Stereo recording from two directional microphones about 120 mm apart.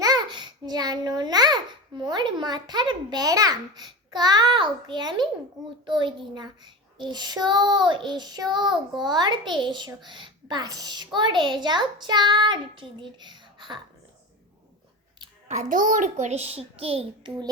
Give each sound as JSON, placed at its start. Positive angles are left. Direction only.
{"t": 0.0, "sound": "a child's voice", "side_deg": -35}
{"t": 15.4, "sound": "a child's voice", "side_deg": -85}